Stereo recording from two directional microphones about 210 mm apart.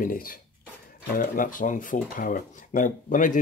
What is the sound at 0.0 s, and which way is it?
Speech, 45° left (ahead or behind).